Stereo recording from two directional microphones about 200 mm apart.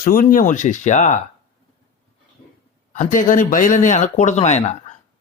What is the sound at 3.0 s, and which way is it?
Speech, 40° left (ahead or behind).